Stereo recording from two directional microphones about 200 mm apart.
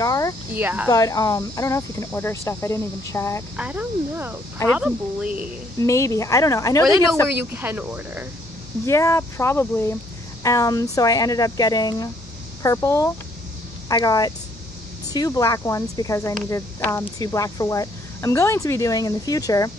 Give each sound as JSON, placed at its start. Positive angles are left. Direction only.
{"t": 0.0, "sound": "cricket", "side_deg": 15}
{"t": 0.5, "sound": "speech", "side_deg": -10}
{"t": 0.8, "sound": "speech", "side_deg": 15}
{"t": 3.5, "sound": "speech", "side_deg": -5}
{"t": 5.8, "sound": "speech", "side_deg": 15}
{"t": 7.5, "sound": "speech", "side_deg": -10}
{"t": 8.8, "sound": "speech", "side_deg": 15}